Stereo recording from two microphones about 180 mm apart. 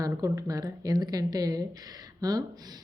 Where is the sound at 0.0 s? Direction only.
20° right (ahead or behind).